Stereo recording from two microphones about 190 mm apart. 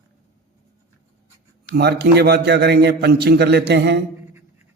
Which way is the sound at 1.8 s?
60° right (ahead or behind).